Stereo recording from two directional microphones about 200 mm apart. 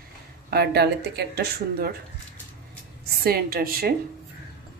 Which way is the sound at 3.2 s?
50° right (ahead or behind).